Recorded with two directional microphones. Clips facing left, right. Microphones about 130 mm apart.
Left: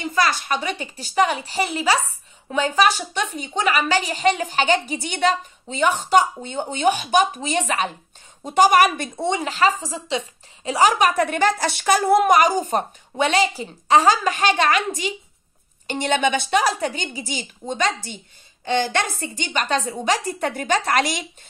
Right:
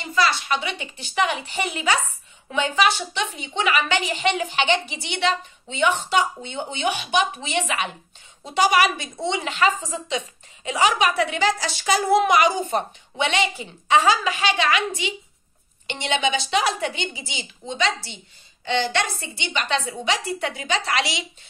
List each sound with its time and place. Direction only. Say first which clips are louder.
0.1 s a woman's voice: right 1 dB; 45° left (ahead or behind)